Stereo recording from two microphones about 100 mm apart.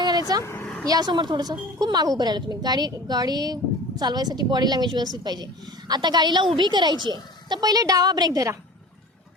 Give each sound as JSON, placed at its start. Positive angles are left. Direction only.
{"t": 0.0, "sound": "vehicle", "side_deg": -45}
{"t": 0.6, "sound": "vehicle", "side_deg": 10}
{"t": 0.9, "sound": "a woman's voice", "side_deg": -45}